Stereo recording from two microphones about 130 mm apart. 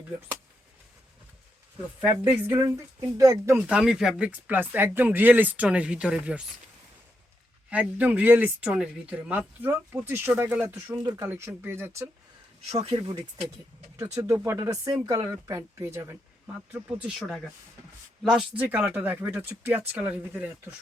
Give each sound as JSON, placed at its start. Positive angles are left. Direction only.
{"t": 2.3, "sound": "speech", "side_deg": -15}
{"t": 3.7, "sound": "speech", "side_deg": -5}
{"t": 7.7, "sound": "speech", "side_deg": -10}
{"t": 12.6, "sound": "speech", "side_deg": -50}
{"t": 14.0, "sound": "speech", "side_deg": -25}
{"t": 17.2, "sound": "speech", "side_deg": 0}
{"t": 18.6, "sound": "speech", "side_deg": -15}